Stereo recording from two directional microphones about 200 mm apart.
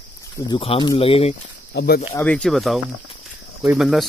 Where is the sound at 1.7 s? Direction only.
55° left (ahead or behind).